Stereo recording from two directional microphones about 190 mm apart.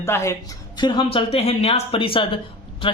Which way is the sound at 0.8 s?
25° left (ahead or behind).